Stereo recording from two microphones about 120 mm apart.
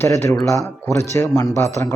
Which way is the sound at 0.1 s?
25° left (ahead or behind).